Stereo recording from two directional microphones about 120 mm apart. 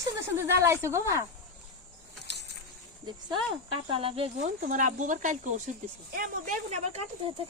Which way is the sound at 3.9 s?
50° right (ahead or behind).